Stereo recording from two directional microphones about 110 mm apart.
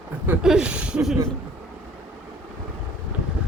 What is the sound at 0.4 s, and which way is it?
Speech, 5° right (ahead or behind).